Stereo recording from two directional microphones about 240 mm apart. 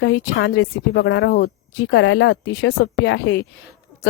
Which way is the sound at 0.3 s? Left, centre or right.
Left.